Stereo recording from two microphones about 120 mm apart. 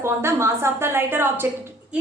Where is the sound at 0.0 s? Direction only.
20° right (ahead or behind).